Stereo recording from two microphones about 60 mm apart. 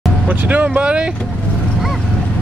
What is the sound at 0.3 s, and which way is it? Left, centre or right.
Speech, right.